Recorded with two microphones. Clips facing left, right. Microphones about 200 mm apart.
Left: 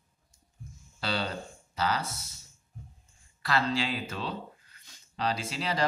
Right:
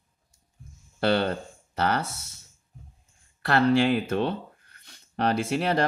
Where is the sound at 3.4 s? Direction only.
60° right (ahead or behind).